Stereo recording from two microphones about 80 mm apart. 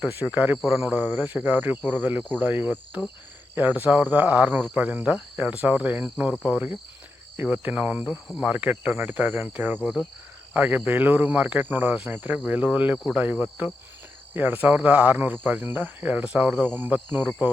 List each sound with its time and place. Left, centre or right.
0.3 s speech: centre
0.6 s speech: centre
1.2 s speech: right
8.0 s speech: centre
8.4 s speech: centre
9.8 s speech: centre
10.5 s speech: centre
14.3 s speech: right